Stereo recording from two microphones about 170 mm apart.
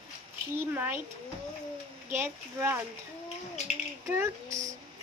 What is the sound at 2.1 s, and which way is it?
Speech, 10° right (ahead or behind).